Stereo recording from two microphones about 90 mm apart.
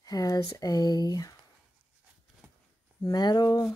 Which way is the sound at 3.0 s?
50° left (ahead or behind).